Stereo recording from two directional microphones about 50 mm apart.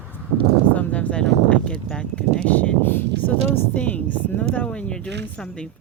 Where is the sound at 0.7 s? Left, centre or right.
Left.